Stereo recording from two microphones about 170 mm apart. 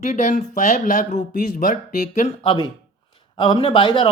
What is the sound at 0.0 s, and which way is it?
Speech, 45° left (ahead or behind).